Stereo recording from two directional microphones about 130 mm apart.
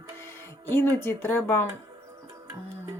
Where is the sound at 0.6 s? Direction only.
15° left (ahead or behind).